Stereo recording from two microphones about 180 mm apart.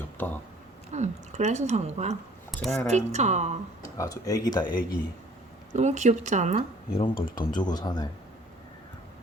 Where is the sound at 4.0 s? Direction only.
20° left (ahead or behind).